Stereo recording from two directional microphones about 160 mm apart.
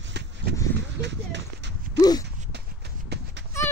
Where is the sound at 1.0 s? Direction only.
90° right.